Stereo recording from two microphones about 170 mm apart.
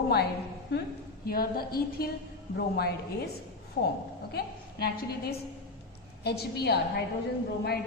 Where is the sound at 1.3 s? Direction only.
60° left (ahead or behind).